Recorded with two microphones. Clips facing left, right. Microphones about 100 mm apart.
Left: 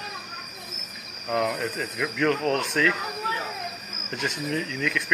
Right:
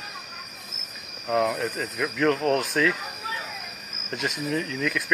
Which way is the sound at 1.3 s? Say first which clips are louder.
Right 2 dB; 5° right (ahead or behind).